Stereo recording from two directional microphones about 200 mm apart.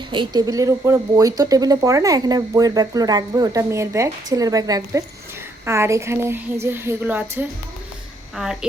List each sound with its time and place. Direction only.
0.1 s speech: 20° right (ahead or behind); by 8.5 s 5° right (ahead or behind)